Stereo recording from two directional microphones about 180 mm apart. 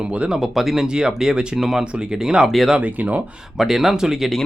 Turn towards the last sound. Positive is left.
turn(degrees=0)  # may be behind; listen again after turning